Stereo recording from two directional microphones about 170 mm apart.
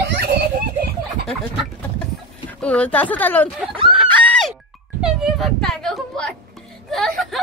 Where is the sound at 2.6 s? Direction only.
5° left (ahead or behind).